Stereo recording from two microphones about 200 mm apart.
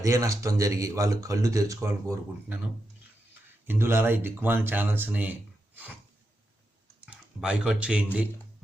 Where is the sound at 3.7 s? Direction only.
10° right (ahead or behind).